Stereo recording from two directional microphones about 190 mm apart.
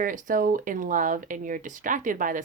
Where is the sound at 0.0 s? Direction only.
45° right (ahead or behind).